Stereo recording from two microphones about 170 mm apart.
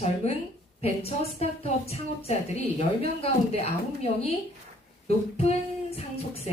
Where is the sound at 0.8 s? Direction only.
35° left (ahead or behind).